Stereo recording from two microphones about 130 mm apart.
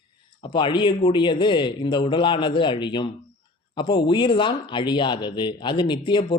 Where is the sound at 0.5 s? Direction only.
35° left (ahead or behind).